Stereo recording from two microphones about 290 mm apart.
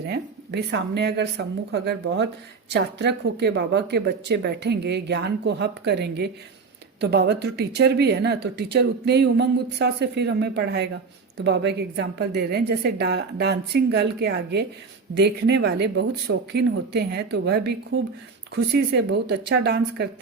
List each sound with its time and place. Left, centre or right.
0.0 s speech: right